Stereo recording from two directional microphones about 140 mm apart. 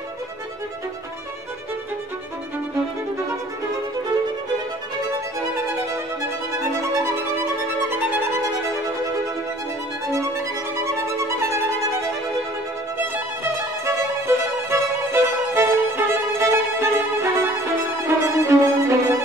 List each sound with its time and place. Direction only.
6.6 s violin: 20° right (ahead or behind)
10.8 s violin: 20° right (ahead or behind)
12.9 s music: 15° right (ahead or behind)
18.0 s violin: 20° right (ahead or behind)